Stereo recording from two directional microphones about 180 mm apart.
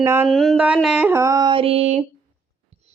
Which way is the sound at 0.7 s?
5° right (ahead or behind).